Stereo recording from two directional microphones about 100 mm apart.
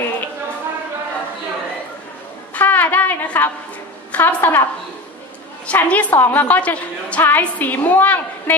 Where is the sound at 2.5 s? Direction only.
15° left (ahead or behind).